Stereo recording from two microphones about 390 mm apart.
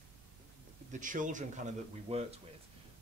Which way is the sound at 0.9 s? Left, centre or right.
Centre.